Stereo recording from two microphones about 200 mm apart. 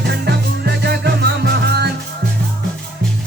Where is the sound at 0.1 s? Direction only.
55° right (ahead or behind).